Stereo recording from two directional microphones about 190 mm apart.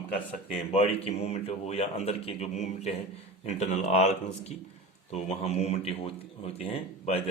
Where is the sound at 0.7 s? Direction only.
35° left (ahead or behind).